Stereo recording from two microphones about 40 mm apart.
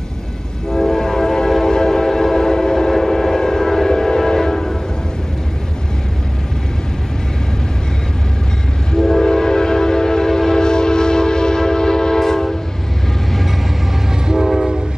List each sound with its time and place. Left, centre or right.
0.7 s train: centre
8.9 s train: centre
14.2 s train: centre